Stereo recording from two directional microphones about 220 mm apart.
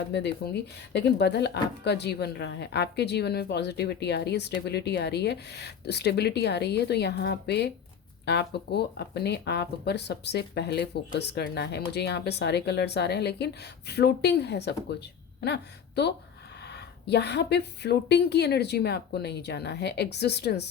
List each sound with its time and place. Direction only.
0.1 s a woman's voice: 50° left (ahead or behind)